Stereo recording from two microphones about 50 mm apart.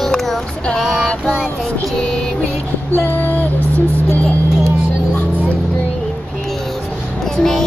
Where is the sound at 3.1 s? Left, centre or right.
Left.